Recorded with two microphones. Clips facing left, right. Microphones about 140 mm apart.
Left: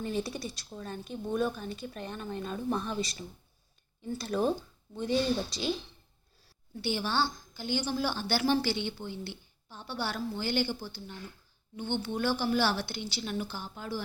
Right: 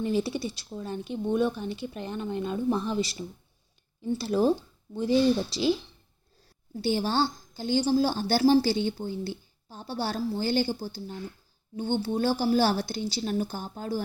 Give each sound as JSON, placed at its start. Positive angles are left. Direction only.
{"t": 0.3, "sound": "speech", "side_deg": -25}
{"t": 6.7, "sound": "a woman's voice", "side_deg": -40}